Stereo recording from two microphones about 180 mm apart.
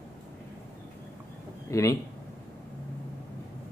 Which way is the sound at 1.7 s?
15° left (ahead or behind).